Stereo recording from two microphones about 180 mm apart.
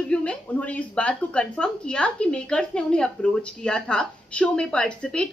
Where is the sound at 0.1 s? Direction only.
5° left (ahead or behind).